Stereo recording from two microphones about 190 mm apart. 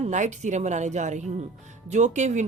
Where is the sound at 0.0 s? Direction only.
40° right (ahead or behind).